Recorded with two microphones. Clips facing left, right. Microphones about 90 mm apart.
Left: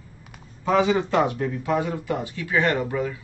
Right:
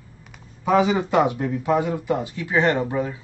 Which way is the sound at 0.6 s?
15° right (ahead or behind).